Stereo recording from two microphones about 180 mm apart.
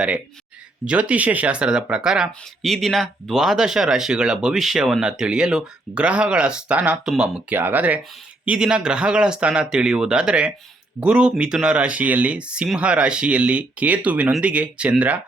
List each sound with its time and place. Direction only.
0.9 s speech: 5° right (ahead or behind)